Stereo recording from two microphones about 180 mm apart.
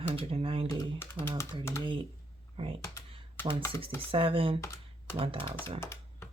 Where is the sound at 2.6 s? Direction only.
30° right (ahead or behind).